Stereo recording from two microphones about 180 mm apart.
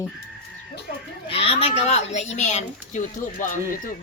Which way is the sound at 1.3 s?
30° left (ahead or behind).